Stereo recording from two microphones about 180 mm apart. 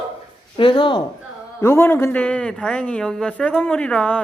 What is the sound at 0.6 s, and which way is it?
Speech, 25° left (ahead or behind).